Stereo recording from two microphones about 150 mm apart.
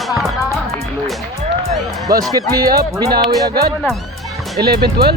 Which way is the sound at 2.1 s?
90° right.